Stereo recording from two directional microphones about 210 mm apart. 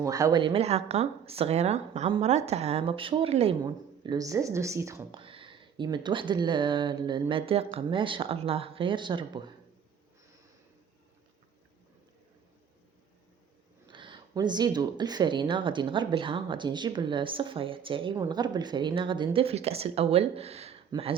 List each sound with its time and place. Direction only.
0.0 s speech: 15° right (ahead or behind)
5.1 s speech: 25° right (ahead or behind)
13.8 s speech: 20° right (ahead or behind)